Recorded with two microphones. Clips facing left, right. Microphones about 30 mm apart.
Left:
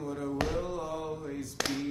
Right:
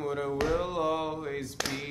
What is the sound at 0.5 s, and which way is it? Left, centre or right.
Music, right.